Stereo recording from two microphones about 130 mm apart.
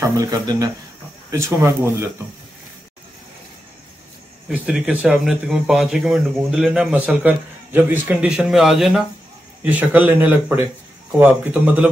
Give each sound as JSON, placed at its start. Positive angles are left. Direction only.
{"t": 0.0, "sound": "speech", "side_deg": -25}
{"t": 4.5, "sound": "speech", "side_deg": -5}